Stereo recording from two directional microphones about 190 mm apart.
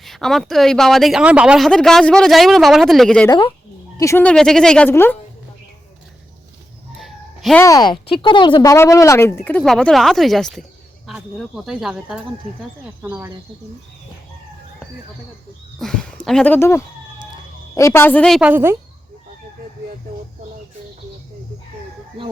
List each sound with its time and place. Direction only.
0.0 s speech: centre (ahead or behind)
3.2 s speech: 25° left (ahead or behind)
7.0 s a sound: centre (ahead or behind)
7.6 s speech: 20° left (ahead or behind); by 13.3 s 10° right (ahead or behind)
15.8 s speech: 5° left (ahead or behind); by 18.8 s 10° right (ahead or behind)